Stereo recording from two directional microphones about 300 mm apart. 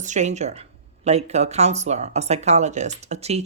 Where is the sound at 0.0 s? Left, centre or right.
Right.